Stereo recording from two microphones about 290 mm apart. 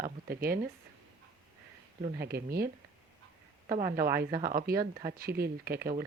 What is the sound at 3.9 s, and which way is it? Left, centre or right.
Speech, right.